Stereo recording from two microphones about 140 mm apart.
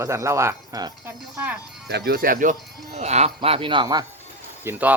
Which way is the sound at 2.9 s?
50° right (ahead or behind).